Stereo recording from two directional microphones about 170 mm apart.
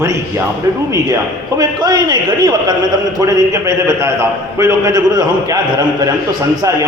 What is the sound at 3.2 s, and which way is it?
A man's voice, 20° right (ahead or behind).